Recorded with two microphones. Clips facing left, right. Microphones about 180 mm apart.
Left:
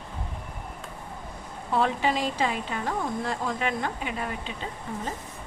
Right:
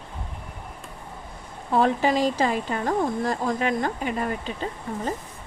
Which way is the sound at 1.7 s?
40° right (ahead or behind).